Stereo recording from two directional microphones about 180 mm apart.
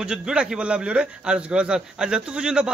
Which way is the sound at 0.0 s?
5° right (ahead or behind).